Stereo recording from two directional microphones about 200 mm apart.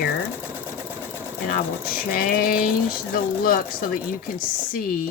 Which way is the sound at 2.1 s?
45° left (ahead or behind).